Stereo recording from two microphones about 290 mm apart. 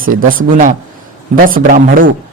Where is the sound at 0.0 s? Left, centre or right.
Right.